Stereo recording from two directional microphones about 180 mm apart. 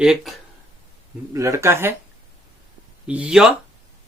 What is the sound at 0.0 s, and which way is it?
Speech, 5° right (ahead or behind).